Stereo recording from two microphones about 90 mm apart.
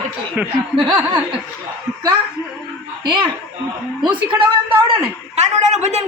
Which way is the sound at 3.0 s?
60° right (ahead or behind).